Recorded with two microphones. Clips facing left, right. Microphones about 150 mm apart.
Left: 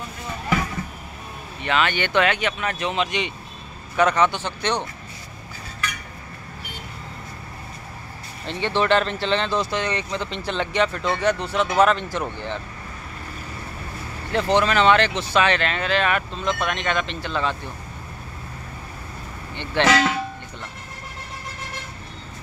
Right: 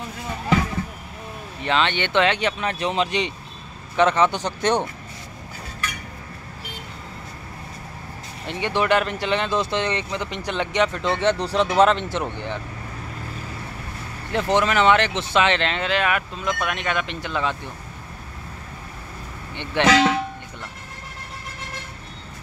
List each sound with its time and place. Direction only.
1.6 s speech: 30° right (ahead or behind); by 4.8 s 45° right (ahead or behind)
8.5 s speech: 15° right (ahead or behind)
14.3 s speech: 20° right (ahead or behind)
19.5 s speech: 15° right (ahead or behind)